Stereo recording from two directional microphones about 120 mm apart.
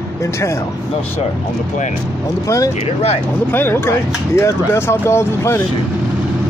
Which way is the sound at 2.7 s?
60° left (ahead or behind).